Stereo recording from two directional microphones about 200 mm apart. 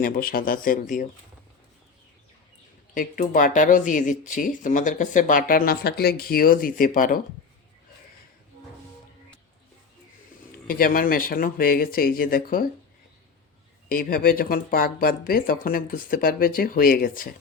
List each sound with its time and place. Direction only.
0.0 s speech: 50° left (ahead or behind)
2.9 s speech: 45° left (ahead or behind)
10.7 s speech: 45° left (ahead or behind)
13.8 s speech: 45° left (ahead or behind)